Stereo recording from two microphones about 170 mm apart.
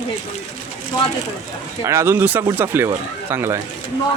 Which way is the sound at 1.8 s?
15° right (ahead or behind).